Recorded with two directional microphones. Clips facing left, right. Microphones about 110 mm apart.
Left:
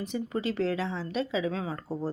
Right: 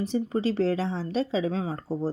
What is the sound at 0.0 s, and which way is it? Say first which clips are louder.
A woman's voice: right 5 dB; 35° right (ahead or behind).